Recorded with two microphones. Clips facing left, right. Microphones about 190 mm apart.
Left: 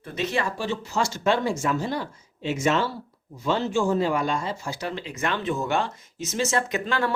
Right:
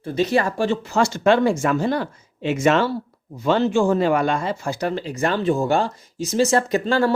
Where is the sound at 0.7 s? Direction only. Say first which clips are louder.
Right 6 dB; 60° right (ahead or behind).